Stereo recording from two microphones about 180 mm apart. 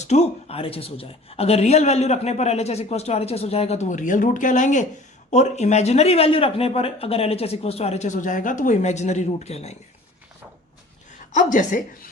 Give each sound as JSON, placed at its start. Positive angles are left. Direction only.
{"t": 0.0, "sound": "speech", "side_deg": 35}
{"t": 11.3, "sound": "a woman's voice", "side_deg": 45}